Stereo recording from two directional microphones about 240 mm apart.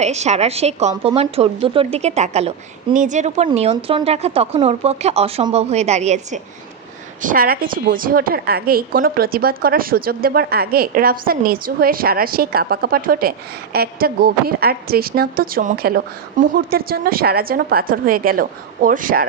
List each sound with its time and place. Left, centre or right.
0.0 s a woman's voice: right